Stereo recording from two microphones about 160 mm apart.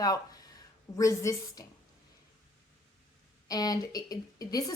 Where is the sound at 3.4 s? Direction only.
25° left (ahead or behind).